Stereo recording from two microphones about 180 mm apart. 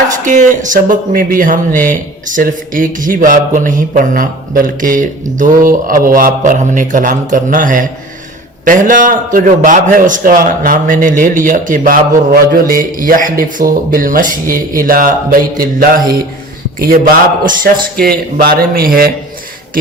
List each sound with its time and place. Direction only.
0.3 s a man's voice: 45° right (ahead or behind)